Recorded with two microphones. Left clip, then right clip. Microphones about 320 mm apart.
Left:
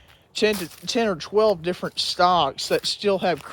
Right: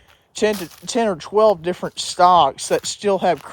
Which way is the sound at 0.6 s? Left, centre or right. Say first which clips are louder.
Right 3 dB; right.